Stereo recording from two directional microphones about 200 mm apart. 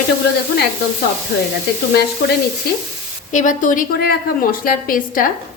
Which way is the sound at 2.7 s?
50° left (ahead or behind).